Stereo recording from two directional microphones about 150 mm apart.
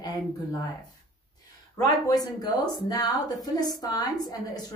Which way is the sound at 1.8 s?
25° left (ahead or behind).